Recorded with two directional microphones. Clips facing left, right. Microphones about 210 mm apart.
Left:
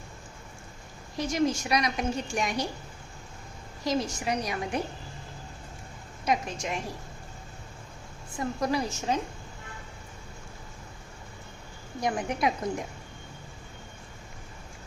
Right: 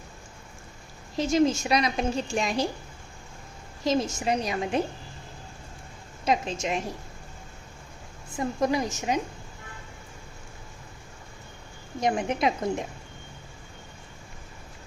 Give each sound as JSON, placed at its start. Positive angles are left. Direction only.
{"t": 1.1, "sound": "a woman's voice", "side_deg": -25}
{"t": 3.8, "sound": "a woman's voice", "side_deg": -25}
{"t": 6.2, "sound": "a woman's voice", "side_deg": -25}
{"t": 8.4, "sound": "a woman's voice", "side_deg": -20}
{"t": 11.9, "sound": "a woman's voice", "side_deg": -20}